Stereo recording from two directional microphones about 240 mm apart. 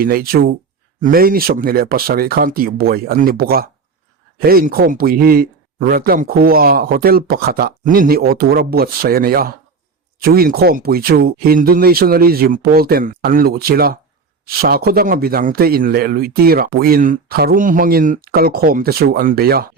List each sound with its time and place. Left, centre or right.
0.0 s a man's voice: right